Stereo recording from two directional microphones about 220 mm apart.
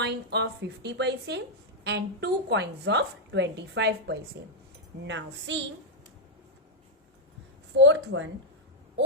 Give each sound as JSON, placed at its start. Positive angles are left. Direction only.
{"t": 0.0, "sound": "a woman's voice", "side_deg": -50}
{"t": 7.8, "sound": "a woman's voice", "side_deg": -55}